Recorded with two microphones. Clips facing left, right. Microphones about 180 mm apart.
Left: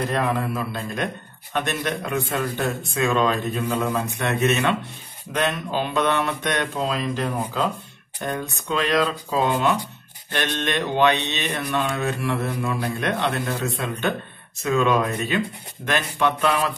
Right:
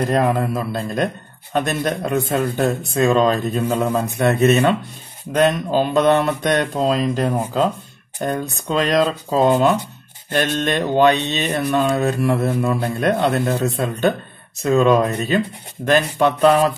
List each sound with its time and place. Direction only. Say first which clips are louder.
0.1 s a man's voice: right 5 dB; 40° right (ahead or behind)